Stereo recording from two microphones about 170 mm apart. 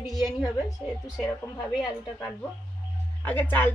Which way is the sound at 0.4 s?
20° left (ahead or behind).